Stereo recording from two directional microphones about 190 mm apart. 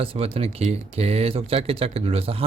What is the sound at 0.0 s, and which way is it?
Speech, 30° right (ahead or behind).